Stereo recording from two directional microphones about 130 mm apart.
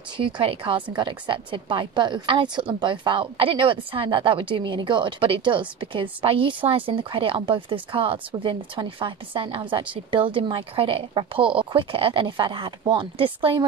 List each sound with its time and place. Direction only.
0.2 s a woman's voice: 40° right (ahead or behind)